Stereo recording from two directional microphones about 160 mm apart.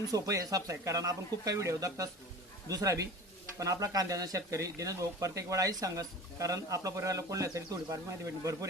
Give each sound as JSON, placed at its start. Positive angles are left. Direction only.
{"t": 0.1, "sound": "speech", "side_deg": -20}